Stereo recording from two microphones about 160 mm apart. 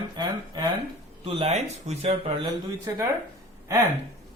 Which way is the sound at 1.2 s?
35° right (ahead or behind).